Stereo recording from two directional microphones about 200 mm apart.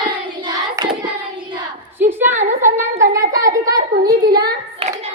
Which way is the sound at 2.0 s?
10° right (ahead or behind).